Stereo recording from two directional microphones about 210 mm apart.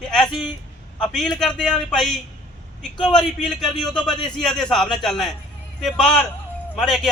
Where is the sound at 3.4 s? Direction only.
5° left (ahead or behind).